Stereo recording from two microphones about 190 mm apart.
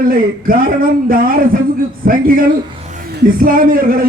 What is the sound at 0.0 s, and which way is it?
Speech, 50° right (ahead or behind).